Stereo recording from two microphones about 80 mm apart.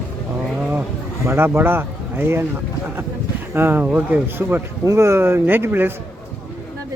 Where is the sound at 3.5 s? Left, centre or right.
Right.